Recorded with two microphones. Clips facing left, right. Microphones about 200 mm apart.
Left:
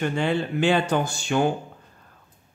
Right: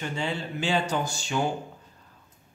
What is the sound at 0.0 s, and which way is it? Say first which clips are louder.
Speech: left 7 dB; 60° left (ahead or behind).